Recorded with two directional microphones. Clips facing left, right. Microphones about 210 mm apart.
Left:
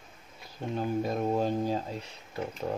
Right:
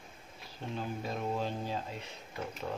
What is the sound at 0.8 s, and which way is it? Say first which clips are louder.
Speech: left 8 dB; 45° left (ahead or behind).